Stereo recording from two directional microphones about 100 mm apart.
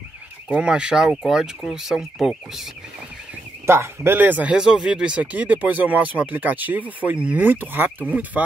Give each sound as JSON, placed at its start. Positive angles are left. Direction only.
{"t": 0.5, "sound": "speech", "side_deg": -10}
{"t": 3.6, "sound": "speech", "side_deg": -25}